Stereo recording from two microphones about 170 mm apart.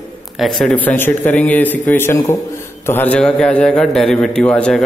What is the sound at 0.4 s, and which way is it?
A man's voice, centre (ahead or behind).